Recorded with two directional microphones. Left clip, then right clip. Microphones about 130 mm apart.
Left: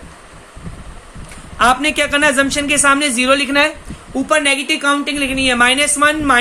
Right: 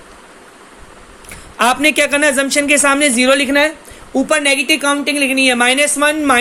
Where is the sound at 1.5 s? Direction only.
45° right (ahead or behind).